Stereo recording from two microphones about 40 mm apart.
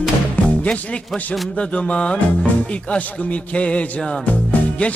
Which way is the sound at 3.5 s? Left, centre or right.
Left.